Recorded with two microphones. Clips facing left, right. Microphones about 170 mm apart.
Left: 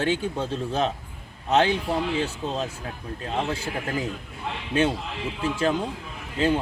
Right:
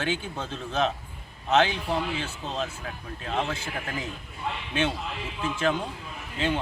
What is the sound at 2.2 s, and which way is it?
Speech, 35° left (ahead or behind).